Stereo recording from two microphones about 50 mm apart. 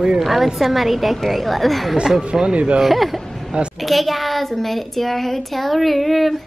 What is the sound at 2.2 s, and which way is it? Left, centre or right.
Speech, centre.